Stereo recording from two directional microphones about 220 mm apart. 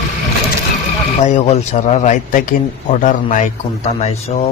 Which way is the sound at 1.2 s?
30° left (ahead or behind).